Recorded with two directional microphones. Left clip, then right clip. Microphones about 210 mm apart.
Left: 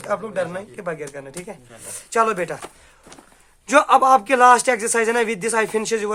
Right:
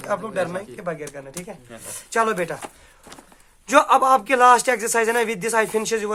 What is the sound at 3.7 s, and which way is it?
Speech, 15° left (ahead or behind).